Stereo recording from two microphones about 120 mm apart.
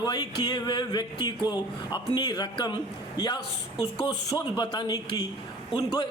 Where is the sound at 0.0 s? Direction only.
35° left (ahead or behind).